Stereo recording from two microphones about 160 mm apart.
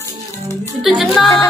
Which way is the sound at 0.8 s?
Centre (ahead or behind).